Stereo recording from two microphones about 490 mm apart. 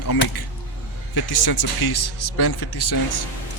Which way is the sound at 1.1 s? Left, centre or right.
Left.